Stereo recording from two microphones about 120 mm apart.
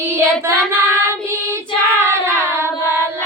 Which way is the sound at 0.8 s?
20° right (ahead or behind).